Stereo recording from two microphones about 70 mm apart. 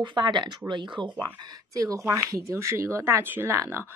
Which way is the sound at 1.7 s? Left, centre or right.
Right.